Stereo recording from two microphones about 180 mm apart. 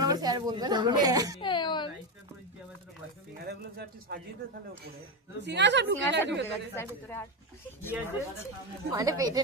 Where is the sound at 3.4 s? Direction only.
60° right (ahead or behind).